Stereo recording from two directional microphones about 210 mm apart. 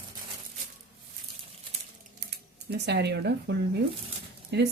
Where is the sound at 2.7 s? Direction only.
50° right (ahead or behind).